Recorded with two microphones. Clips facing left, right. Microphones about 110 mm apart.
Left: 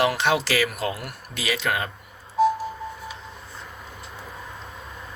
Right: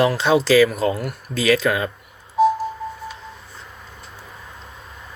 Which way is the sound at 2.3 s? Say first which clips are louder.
Right 4 dB; centre (ahead or behind).